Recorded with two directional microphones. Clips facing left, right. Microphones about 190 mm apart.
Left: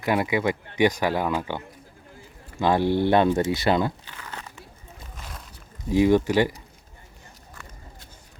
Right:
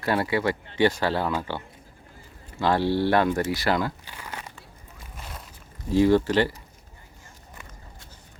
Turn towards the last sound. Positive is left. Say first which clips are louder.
# left 1 dB
turn(degrees=15)  # may be behind; listen again after turning